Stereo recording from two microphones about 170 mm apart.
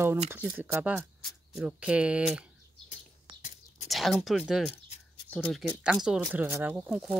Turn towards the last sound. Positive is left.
turn(degrees=-5)  # may be behind; listen again after turning